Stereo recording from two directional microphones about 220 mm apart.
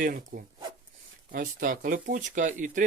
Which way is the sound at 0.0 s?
40° right (ahead or behind).